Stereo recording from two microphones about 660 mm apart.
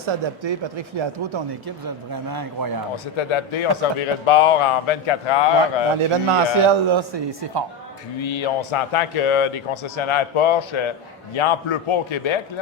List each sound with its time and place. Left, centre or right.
0.0 s speech: right
3.2 s a man's voice: left
6.6 s speech: right
8.2 s a man's voice: left